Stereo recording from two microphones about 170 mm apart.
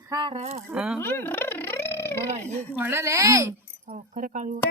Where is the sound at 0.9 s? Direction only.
10° left (ahead or behind).